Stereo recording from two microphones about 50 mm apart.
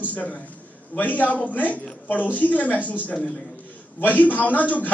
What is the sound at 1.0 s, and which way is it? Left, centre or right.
A man's voice, left.